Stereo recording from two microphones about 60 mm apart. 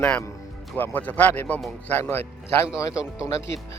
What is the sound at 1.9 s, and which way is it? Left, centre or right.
Speech, left.